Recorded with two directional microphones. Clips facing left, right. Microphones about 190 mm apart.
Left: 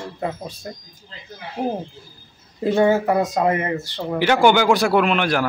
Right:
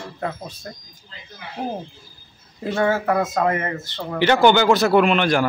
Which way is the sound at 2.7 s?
20° left (ahead or behind).